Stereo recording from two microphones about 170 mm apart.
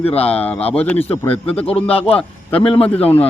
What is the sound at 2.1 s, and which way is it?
A man's voice, 5° left (ahead or behind).